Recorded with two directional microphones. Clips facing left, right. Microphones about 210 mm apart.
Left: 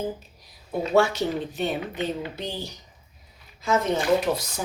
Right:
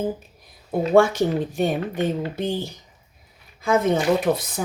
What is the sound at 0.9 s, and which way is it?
Speech, 50° right (ahead or behind).